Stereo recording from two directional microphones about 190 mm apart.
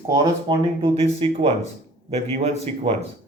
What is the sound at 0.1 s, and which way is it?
Speech, 25° right (ahead or behind).